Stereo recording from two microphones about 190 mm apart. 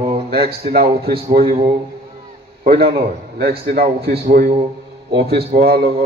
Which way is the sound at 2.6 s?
55° right (ahead or behind).